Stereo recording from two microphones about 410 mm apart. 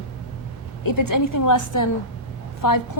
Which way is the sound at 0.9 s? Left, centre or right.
Left.